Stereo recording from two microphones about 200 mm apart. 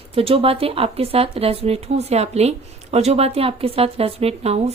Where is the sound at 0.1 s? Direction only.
30° right (ahead or behind).